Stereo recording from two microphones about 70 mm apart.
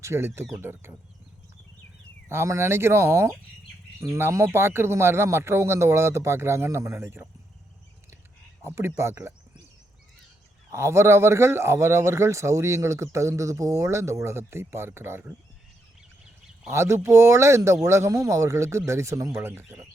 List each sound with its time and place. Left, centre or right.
0.0 s speech: right
2.3 s speech: right
8.6 s speech: right
10.7 s speech: right
16.6 s speech: right
19.3 s speech: right